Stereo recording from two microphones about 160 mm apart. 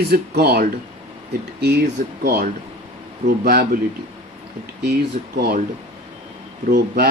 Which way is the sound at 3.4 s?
70° right (ahead or behind).